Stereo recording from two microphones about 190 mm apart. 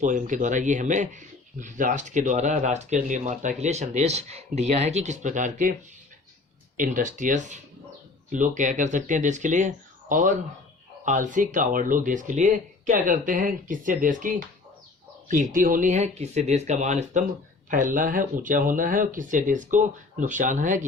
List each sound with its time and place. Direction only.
0.0 s speech: 40° right (ahead or behind)
6.7 s speech: 45° right (ahead or behind)